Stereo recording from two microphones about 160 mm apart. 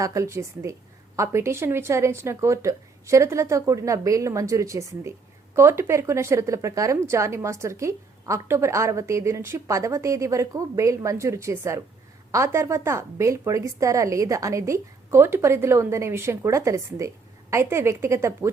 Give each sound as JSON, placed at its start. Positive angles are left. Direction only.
{"t": 0.0, "sound": "speech", "side_deg": -20}